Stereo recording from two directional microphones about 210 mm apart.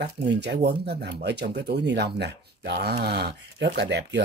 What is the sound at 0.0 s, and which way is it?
Speech, 50° right (ahead or behind).